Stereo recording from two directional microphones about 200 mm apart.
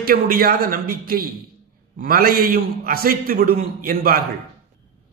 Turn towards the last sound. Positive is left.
turn(degrees=-50)  # may be behind; listen again after turning